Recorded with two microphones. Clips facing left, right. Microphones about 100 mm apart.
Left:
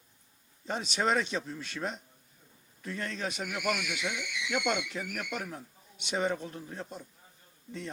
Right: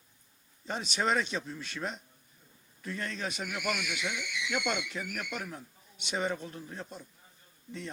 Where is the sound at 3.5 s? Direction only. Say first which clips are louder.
Left 3 dB; 70° left (ahead or behind); by 6.4 s 45° left (ahead or behind).